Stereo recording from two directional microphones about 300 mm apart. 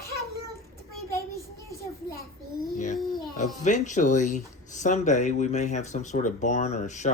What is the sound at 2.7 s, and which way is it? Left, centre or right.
A child's voice, left.